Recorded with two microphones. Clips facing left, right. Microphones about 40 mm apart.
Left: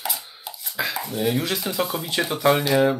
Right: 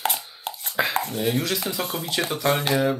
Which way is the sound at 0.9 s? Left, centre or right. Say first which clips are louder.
Right 4 dB; right.